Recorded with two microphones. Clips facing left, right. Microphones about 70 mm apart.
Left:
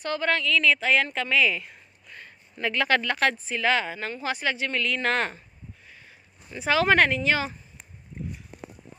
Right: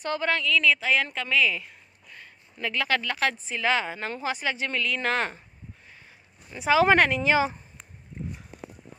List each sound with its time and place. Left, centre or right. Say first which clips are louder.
0.0 s a woman's voice: left 1 dB; centre
3.4 s a woman's voice: left 1 dB; centre
6.5 s a woman's voice: right 2 dB; centre